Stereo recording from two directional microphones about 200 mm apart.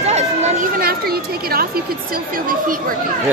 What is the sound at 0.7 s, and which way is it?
Speech, 50° right (ahead or behind).